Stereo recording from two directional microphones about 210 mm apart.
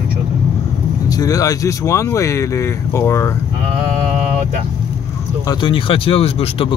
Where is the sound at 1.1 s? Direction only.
15° left (ahead or behind).